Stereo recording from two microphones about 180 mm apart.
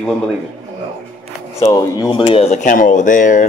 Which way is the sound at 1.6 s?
20° left (ahead or behind).